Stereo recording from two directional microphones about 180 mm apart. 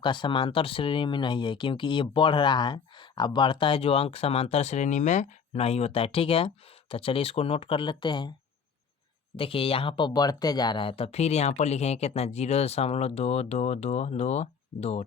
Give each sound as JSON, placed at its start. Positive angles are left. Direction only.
{"t": 0.0, "sound": "speech", "side_deg": 25}
{"t": 9.3, "sound": "speech", "side_deg": 30}